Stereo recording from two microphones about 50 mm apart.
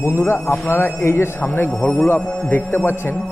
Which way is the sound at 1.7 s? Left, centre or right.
Left.